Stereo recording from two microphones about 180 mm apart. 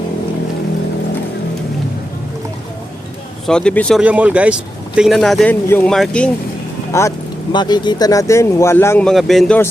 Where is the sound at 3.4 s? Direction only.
5° left (ahead or behind).